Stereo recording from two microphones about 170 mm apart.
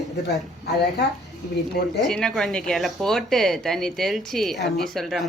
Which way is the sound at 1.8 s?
65° left (ahead or behind).